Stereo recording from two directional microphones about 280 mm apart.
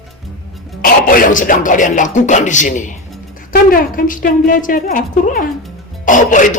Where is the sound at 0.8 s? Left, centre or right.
Left.